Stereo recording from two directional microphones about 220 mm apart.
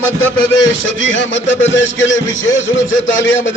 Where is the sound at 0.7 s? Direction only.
60° left (ahead or behind).